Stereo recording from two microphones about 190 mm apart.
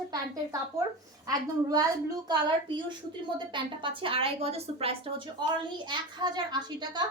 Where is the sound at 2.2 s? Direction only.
20° right (ahead or behind).